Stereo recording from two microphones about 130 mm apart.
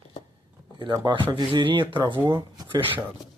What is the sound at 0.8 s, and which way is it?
Speech, 35° right (ahead or behind).